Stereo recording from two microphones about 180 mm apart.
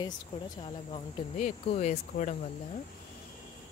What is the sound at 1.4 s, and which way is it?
Speech, 40° left (ahead or behind).